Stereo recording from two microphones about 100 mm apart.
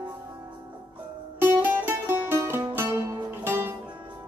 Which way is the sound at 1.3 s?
20° right (ahead or behind).